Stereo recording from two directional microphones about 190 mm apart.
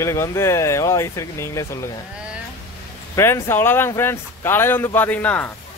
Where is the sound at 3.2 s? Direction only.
10° left (ahead or behind).